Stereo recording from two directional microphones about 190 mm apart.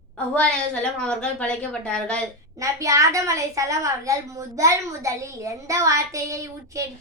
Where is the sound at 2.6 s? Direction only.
15° right (ahead or behind).